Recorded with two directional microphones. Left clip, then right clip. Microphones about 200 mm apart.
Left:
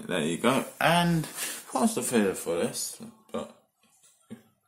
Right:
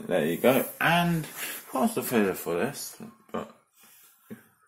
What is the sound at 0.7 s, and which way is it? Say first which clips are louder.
Speech: even; 25° left (ahead or behind).